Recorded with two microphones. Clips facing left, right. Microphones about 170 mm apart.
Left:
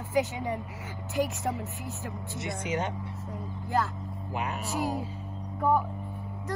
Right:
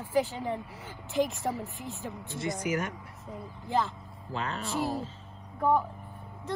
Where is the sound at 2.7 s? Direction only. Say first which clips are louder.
Right 1 dB; 25° left (ahead or behind).